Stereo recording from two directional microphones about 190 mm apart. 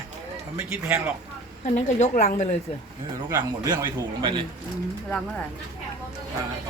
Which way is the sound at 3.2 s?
20° right (ahead or behind).